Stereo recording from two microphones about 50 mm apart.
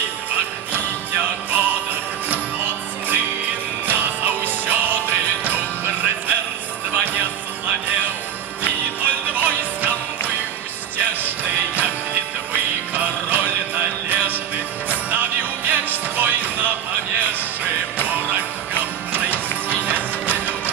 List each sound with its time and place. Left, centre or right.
0.3 s jingle bell: right
2.2 s music: right
17.9 s music: right